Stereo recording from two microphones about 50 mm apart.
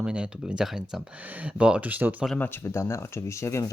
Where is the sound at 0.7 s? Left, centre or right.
Centre.